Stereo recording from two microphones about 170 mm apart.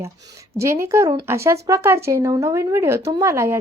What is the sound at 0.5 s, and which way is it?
A woman's voice, 15° right (ahead or behind).